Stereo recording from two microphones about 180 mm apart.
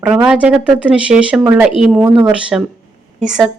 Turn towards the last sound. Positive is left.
turn(degrees=-5)  # may be behind; listen again after turning